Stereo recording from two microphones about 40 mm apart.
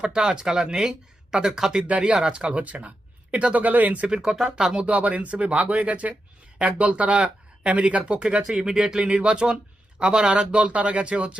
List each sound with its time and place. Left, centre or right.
0.0 s speech: right
1.9 s speech: right
2.5 s speech: right
4.2 s speech: centre
4.9 s speech: right